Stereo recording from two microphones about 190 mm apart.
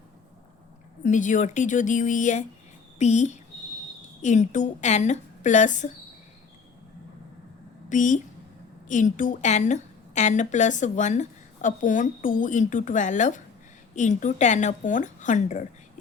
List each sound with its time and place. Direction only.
1.0 s a woman's voice: 40° left (ahead or behind)
7.9 s a woman's voice: 40° left (ahead or behind)